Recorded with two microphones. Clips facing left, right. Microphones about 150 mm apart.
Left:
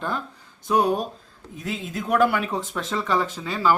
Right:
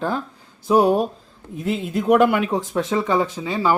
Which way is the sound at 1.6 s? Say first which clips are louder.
Right 7 dB; 15° right (ahead or behind).